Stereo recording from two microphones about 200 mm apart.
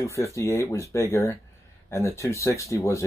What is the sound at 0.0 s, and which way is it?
Speech, 15° left (ahead or behind).